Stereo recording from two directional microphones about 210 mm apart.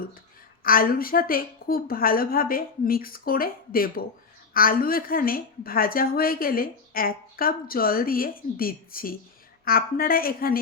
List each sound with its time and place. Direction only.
0.6 s speech: 45° left (ahead or behind)